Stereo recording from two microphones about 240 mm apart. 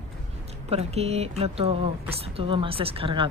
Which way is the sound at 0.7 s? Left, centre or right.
Right.